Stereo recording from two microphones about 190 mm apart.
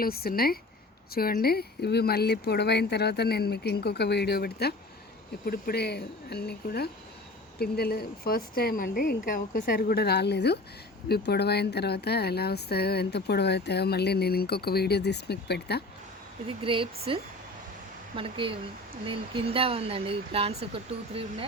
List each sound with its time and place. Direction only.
0.0 s a woman's voice: 55° left (ahead or behind)
16.5 s speech: 30° right (ahead or behind)
18.2 s speech: 25° right (ahead or behind)